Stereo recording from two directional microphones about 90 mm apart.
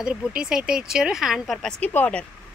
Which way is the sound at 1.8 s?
15° left (ahead or behind).